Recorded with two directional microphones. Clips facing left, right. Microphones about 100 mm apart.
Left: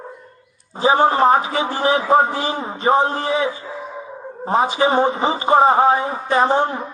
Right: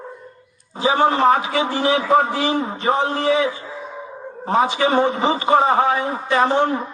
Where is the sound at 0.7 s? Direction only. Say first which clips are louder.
Left 2 dB; 40° left (ahead or behind).